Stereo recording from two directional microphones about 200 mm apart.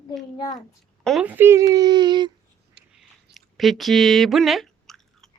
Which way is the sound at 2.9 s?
Centre (ahead or behind).